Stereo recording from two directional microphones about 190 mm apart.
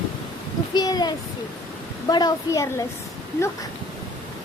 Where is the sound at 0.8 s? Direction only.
20° left (ahead or behind).